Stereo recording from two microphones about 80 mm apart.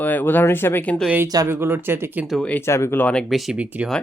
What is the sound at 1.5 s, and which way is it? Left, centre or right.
Speech, right.